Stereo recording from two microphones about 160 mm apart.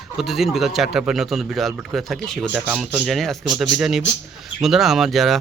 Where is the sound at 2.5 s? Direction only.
10° right (ahead or behind).